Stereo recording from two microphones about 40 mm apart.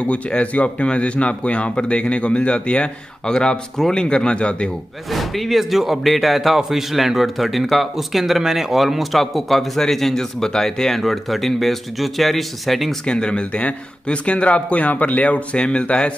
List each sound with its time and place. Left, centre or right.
0.0 s speech: left
5.1 s speech: centre
13.0 s speech: left